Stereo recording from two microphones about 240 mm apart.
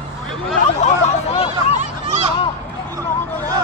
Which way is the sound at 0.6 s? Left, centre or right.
Left.